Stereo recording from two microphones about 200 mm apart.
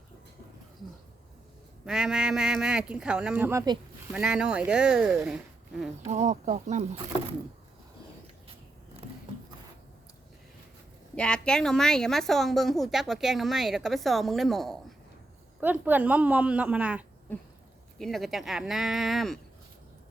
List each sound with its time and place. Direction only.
1.8 s a woman's voice: 5° right (ahead or behind)
4.1 s a woman's voice: 5° right (ahead or behind)
6.1 s speech: 35° right (ahead or behind)
9.0 s a sound: 30° right (ahead or behind)
11.1 s a woman's voice: 5° left (ahead or behind)